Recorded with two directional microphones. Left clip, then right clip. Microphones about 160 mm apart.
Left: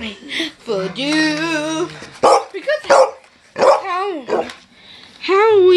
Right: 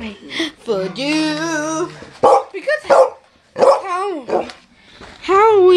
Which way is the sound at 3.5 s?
35° right (ahead or behind).